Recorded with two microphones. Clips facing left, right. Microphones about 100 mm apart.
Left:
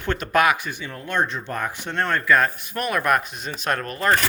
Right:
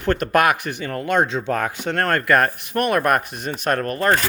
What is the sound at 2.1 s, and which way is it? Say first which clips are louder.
Speech: right 1 dB; 60° right (ahead or behind).